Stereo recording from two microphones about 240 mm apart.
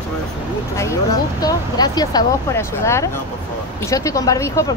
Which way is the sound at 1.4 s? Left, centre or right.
Centre.